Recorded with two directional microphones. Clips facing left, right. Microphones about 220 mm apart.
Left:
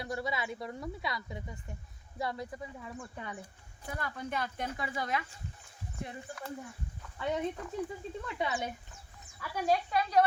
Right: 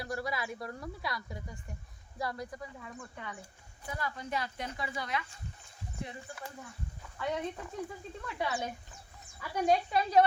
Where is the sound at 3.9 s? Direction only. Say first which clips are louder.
Even; 55° left (ahead or behind).